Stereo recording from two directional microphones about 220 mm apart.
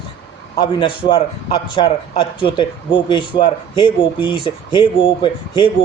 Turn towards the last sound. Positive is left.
turn(degrees=20)  # may be behind; listen again after turning